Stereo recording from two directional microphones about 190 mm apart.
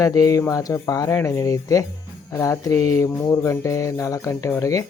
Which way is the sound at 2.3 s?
15° left (ahead or behind).